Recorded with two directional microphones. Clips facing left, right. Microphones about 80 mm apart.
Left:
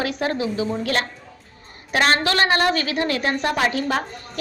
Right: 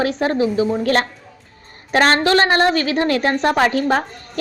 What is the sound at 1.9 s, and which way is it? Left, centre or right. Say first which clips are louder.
A woman's voice: right 5 dB; right.